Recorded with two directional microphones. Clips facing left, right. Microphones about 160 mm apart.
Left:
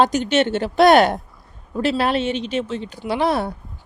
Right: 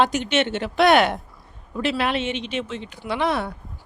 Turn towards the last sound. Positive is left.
turn(degrees=35)  # may be behind; listen again after turning